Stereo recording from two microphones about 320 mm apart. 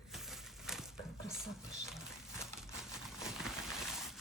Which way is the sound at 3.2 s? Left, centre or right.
Centre.